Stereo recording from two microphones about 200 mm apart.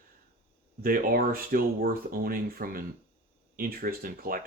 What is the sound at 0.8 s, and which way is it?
Speech, 45° right (ahead or behind).